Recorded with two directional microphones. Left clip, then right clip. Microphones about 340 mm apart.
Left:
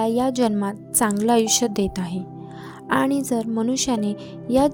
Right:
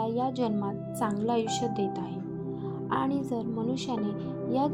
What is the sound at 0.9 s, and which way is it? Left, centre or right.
Speech, left.